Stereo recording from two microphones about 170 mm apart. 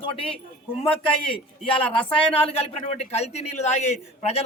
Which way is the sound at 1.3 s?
30° left (ahead or behind).